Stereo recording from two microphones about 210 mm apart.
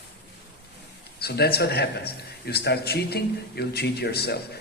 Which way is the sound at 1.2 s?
50° left (ahead or behind).